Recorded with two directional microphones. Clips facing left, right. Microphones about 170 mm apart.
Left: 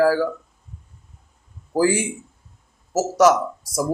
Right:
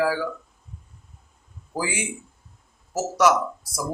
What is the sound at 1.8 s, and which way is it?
Speech, 45° left (ahead or behind).